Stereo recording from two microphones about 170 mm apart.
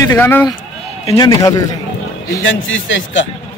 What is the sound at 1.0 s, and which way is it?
Speech, 25° left (ahead or behind).